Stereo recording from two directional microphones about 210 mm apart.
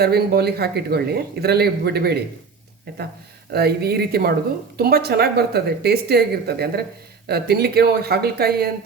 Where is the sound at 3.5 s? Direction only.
50° right (ahead or behind).